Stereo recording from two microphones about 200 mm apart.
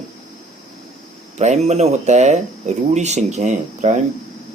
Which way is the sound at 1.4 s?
35° right (ahead or behind).